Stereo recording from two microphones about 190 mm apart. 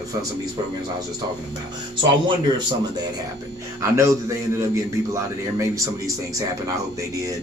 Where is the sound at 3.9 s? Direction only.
15° right (ahead or behind).